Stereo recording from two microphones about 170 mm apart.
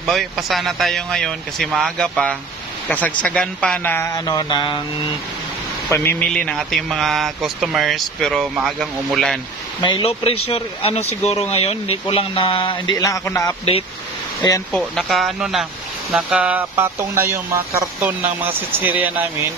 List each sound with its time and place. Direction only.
0.0 s a man's voice: centre (ahead or behind); by 4.7 s 25° left (ahead or behind)
5.9 s speech: 15° left (ahead or behind)
9.8 s speech: 30° left (ahead or behind)
14.7 s speech: centre (ahead or behind)